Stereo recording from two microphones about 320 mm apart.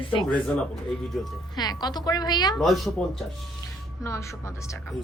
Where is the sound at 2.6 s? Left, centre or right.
Centre.